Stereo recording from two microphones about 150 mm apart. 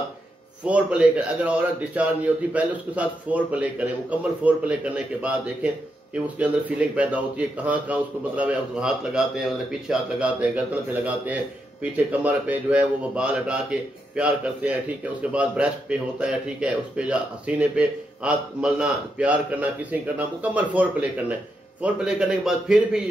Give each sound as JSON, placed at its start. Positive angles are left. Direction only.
{"t": 0.7, "sound": "a man's voice", "side_deg": -10}